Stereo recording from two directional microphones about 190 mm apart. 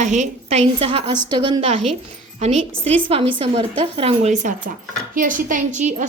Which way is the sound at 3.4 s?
30° right (ahead or behind).